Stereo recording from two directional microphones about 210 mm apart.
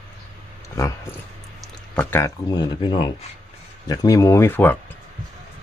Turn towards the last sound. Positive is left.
turn(degrees=10)  # may be behind; listen again after turning